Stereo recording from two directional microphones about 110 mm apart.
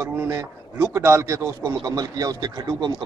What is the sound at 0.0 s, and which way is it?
A man's voice, 25° right (ahead or behind).